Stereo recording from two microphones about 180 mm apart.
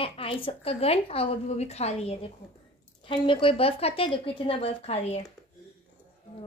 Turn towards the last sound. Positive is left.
turn(degrees=35)  # may be behind; listen again after turning